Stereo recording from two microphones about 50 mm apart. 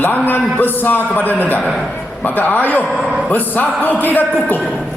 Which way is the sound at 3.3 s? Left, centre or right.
Left.